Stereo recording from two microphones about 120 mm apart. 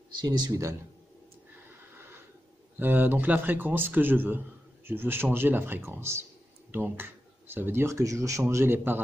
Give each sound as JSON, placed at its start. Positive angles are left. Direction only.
{"t": 0.2, "sound": "speech", "side_deg": -35}
{"t": 2.8, "sound": "speech", "side_deg": -15}